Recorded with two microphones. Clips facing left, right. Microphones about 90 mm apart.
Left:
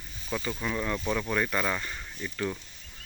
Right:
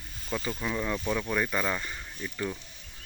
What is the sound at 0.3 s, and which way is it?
Speech, centre (ahead or behind).